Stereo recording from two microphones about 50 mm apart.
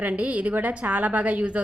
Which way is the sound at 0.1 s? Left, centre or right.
Right.